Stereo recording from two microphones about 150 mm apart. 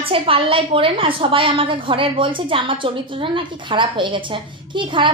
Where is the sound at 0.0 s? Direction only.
35° right (ahead or behind).